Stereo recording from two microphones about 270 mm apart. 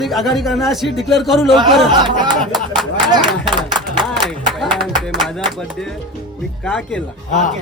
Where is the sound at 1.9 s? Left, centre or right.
Centre.